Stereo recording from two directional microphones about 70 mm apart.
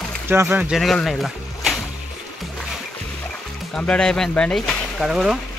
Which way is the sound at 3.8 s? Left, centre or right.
Centre.